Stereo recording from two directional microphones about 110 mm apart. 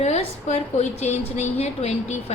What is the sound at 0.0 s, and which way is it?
A woman's voice, 90° left.